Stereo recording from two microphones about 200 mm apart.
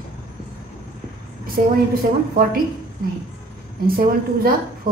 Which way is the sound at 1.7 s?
45° right (ahead or behind).